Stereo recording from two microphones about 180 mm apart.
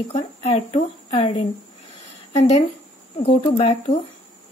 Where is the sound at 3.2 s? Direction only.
35° left (ahead or behind).